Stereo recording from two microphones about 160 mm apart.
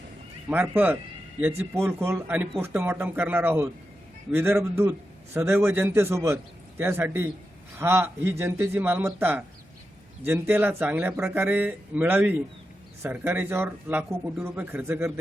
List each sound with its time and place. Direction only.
0.5 s a man's voice: 10° right (ahead or behind)